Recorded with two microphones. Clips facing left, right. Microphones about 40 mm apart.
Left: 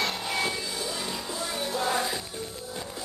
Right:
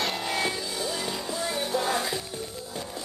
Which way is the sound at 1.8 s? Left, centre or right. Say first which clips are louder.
Even; centre.